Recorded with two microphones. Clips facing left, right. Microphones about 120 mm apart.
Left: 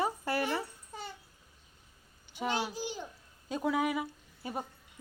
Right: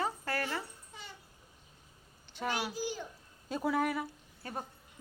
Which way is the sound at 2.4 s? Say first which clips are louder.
Left 1 dB; 25° left (ahead or behind).